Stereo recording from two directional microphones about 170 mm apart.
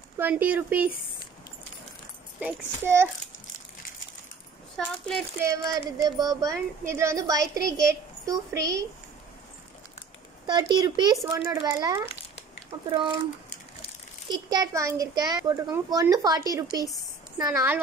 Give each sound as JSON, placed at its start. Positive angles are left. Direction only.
{"t": 0.2, "sound": "speech", "side_deg": -10}
{"t": 2.4, "sound": "speech", "side_deg": -15}
{"t": 4.7, "sound": "speech", "side_deg": 5}
{"t": 5.4, "sound": "a child's voice", "side_deg": -20}
{"t": 10.4, "sound": "a child's voice", "side_deg": -25}
{"t": 14.3, "sound": "a child's voice", "side_deg": -20}